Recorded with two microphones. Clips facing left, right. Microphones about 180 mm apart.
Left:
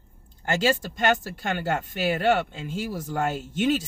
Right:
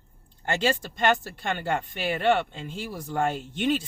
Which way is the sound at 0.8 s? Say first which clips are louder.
Even; 40° left (ahead or behind).